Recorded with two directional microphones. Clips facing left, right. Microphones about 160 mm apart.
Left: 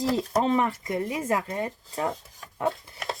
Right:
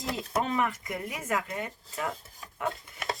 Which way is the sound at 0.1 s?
30° left (ahead or behind).